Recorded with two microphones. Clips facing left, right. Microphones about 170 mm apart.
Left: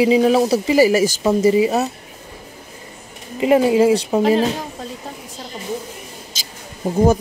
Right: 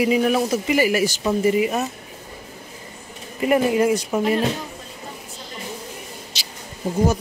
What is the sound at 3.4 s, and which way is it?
Speech, 25° left (ahead or behind).